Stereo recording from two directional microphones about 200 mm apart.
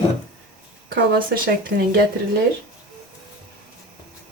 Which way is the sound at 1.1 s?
45° right (ahead or behind).